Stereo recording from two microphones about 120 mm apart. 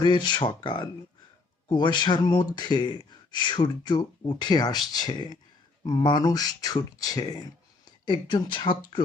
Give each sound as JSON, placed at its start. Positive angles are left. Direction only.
{"t": 0.0, "sound": "speech", "side_deg": 40}